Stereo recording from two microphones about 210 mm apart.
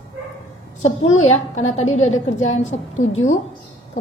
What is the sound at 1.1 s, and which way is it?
Speech, 30° left (ahead or behind).